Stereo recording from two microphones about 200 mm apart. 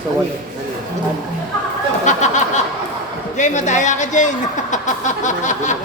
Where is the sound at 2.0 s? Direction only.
35° left (ahead or behind).